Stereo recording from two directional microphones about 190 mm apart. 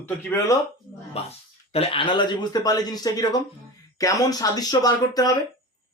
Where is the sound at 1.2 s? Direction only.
30° left (ahead or behind).